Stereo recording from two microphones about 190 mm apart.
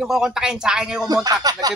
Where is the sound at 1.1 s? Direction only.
20° right (ahead or behind).